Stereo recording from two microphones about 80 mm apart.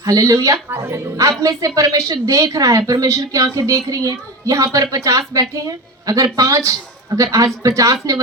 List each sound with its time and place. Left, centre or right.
0.0 s a woman's voice: right
0.7 s speech: right
1.1 s a woman's voice: right